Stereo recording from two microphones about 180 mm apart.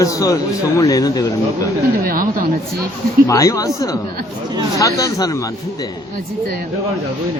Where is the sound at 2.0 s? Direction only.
55° right (ahead or behind).